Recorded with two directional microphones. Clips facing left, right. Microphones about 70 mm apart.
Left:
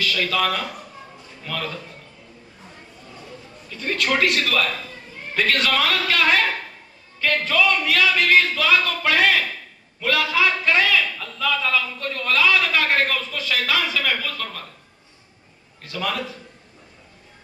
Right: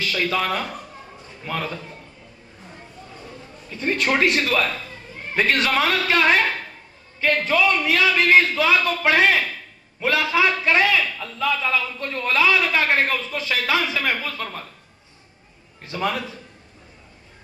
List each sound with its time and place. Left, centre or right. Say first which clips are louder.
0.0 s a man's voice: left 1 dB; right
3.8 s a man's voice: right 1 dB; right
15.8 s a man's voice: right 3 dB; right